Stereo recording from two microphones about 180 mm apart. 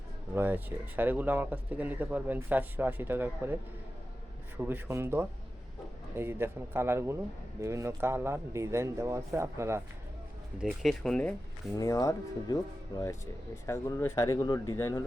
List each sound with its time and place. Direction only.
0.3 s speech: 10° right (ahead or behind)
4.6 s speech: 10° right (ahead or behind)
10.6 s speech: centre (ahead or behind)
11.8 s speech: 20° left (ahead or behind)
13.7 s speech: 15° left (ahead or behind)